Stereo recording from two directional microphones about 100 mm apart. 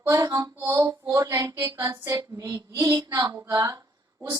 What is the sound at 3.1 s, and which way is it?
Speech, 40° right (ahead or behind).